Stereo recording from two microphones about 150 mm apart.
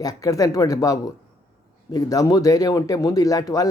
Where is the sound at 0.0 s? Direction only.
25° left (ahead or behind).